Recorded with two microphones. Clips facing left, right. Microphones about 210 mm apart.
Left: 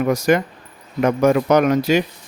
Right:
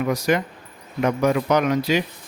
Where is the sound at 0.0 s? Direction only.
45° left (ahead or behind).